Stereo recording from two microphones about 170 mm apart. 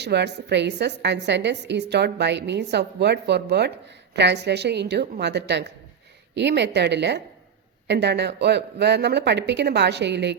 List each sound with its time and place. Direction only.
0.0 s a woman's voice: 85° right
4.1 s a woman's voice: 85° right